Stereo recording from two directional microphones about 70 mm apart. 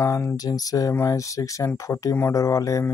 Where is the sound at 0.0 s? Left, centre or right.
Left.